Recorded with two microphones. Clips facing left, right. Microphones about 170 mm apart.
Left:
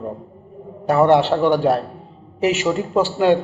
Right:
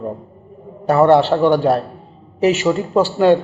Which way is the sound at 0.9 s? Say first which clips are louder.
Right 2 dB; 15° left (ahead or behind).